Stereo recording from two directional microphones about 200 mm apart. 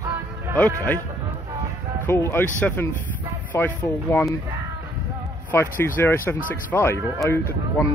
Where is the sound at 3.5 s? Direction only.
10° left (ahead or behind).